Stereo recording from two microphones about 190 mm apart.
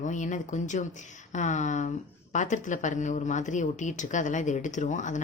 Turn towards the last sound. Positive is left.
turn(degrees=40)  # may be behind; listen again after turning